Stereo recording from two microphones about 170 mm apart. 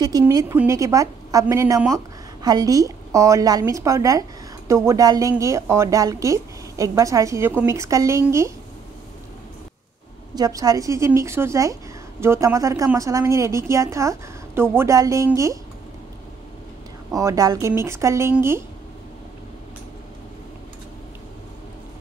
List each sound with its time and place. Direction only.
0.2 s a woman's voice: 20° right (ahead or behind)
10.3 s a woman's voice: 20° right (ahead or behind)
17.1 s a woman's voice: 20° right (ahead or behind)